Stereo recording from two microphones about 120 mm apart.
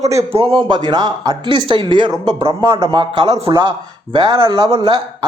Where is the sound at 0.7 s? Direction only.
35° right (ahead or behind).